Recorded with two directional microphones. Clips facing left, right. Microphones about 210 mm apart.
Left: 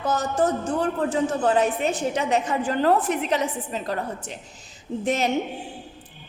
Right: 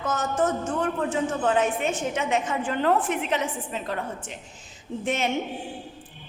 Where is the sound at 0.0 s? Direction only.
35° left (ahead or behind).